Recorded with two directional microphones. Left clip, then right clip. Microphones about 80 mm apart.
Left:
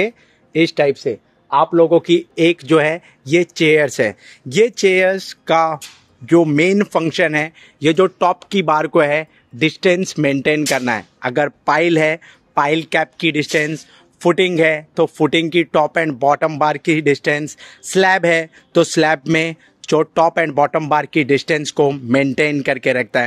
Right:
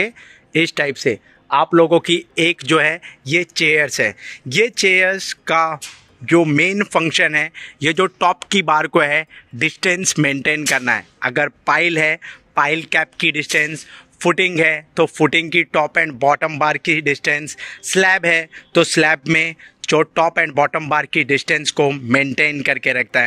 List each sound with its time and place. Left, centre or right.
0.0 s speech: centre
0.9 s speech: right
2.3 s a man's voice: left
3.3 s a man's voice: left
6.2 s a man's voice: left
7.8 s speech: centre
9.7 s speech: centre
11.1 s a man's voice: left
21.6 s speech: left